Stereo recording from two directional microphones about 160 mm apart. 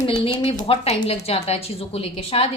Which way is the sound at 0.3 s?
35° left (ahead or behind).